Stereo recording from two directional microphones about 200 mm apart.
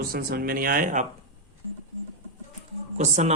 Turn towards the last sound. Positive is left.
turn(degrees=-35)  # may be behind; listen again after turning